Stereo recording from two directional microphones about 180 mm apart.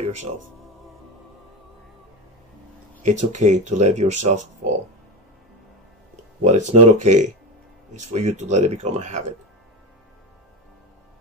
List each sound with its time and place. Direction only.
3.0 s speech: 40° right (ahead or behind)
6.4 s speech: 40° right (ahead or behind)